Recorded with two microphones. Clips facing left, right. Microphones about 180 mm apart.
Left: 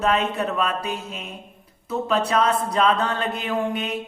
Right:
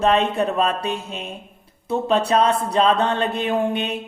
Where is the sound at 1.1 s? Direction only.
30° right (ahead or behind).